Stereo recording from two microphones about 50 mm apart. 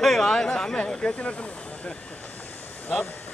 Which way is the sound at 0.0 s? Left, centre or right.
Centre.